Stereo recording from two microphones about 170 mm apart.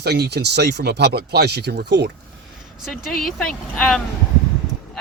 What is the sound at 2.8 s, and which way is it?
Speech, centre (ahead or behind).